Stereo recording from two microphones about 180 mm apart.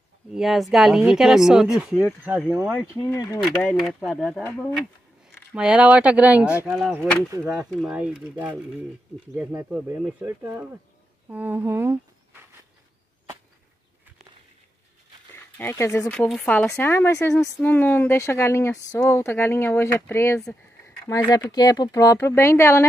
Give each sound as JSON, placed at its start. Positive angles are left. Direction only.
{"t": 0.3, "sound": "speech", "side_deg": 0}
{"t": 2.9, "sound": "speech", "side_deg": 15}
{"t": 3.4, "sound": "speech", "side_deg": 0}
{"t": 15.3, "sound": "speech", "side_deg": 10}